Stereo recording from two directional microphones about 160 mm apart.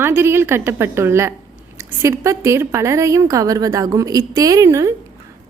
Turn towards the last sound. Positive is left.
turn(degrees=-20)  # may be behind; listen again after turning